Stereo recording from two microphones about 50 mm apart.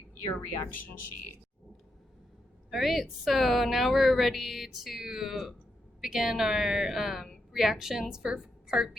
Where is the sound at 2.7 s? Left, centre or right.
Centre.